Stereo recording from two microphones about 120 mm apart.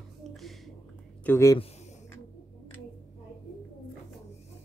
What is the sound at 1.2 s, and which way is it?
Speech, 25° left (ahead or behind).